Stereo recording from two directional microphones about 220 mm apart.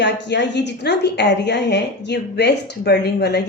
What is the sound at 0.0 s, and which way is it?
A woman's voice, 50° left (ahead or behind).